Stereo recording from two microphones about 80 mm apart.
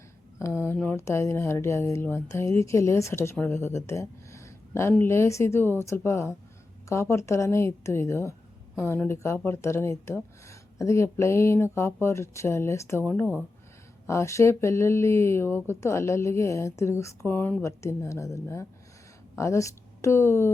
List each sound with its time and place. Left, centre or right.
0.3 s a sound: left
0.9 s speech: left
14.1 s speech: left
17.2 s speech: left
17.6 s speech: left